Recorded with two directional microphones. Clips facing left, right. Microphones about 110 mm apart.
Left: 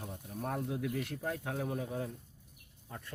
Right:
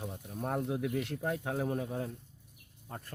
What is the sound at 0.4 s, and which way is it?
Speech, 30° right (ahead or behind).